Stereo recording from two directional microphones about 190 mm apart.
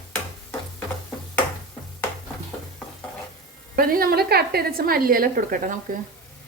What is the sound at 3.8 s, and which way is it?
A woman's voice, 50° right (ahead or behind).